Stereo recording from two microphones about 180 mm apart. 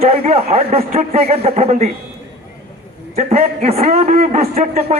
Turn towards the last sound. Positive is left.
turn(degrees=-35)  # may be behind; listen again after turning